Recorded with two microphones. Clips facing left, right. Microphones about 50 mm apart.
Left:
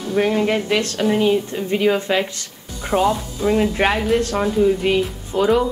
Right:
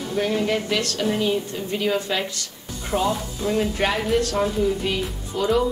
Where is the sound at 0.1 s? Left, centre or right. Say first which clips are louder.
Left 5 dB; left.